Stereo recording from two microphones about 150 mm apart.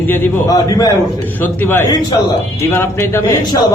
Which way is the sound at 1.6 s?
15° left (ahead or behind).